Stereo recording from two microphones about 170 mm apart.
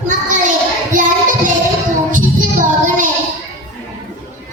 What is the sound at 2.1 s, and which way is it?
Music, 50° right (ahead or behind).